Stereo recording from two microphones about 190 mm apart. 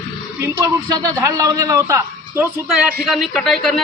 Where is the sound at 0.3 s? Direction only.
15° right (ahead or behind).